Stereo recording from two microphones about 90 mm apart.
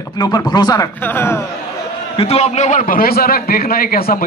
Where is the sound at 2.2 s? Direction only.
90° left.